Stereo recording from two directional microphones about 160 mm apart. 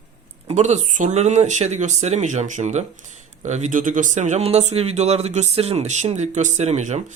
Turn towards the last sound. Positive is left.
turn(degrees=-45)  # may be behind; listen again after turning